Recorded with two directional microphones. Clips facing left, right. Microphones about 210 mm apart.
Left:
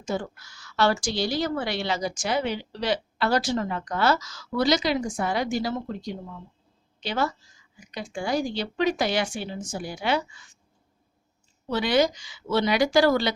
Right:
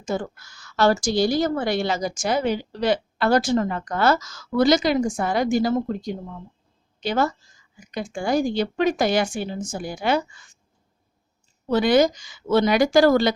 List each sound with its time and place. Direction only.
0.0 s speech: 45° right (ahead or behind)
11.7 s speech: 45° right (ahead or behind)